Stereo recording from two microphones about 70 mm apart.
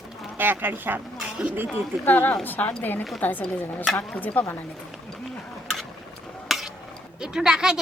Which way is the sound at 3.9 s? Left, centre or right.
Centre.